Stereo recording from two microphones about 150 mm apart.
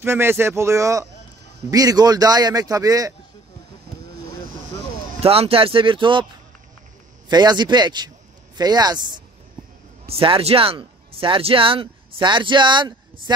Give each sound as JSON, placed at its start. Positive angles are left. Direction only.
{"t": 0.0, "sound": "speech", "side_deg": -15}
{"t": 5.2, "sound": "speech", "side_deg": -40}
{"t": 7.2, "sound": "speech", "side_deg": -30}